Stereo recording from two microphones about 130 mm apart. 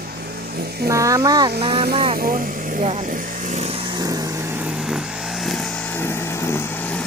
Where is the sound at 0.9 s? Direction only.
25° right (ahead or behind).